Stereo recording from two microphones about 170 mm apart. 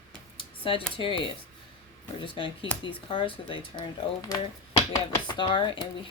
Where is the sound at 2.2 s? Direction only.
30° left (ahead or behind).